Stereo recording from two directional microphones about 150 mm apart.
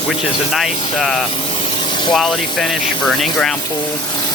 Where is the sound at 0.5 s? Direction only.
Centre (ahead or behind).